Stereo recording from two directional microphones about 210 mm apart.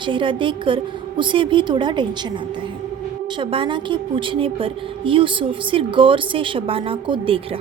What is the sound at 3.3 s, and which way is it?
A woman's voice, 25° right (ahead or behind).